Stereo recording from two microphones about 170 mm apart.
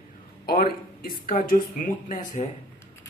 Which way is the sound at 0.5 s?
60° left (ahead or behind).